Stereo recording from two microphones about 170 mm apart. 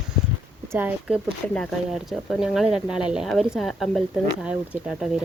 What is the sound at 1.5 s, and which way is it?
Speech, 5° left (ahead or behind).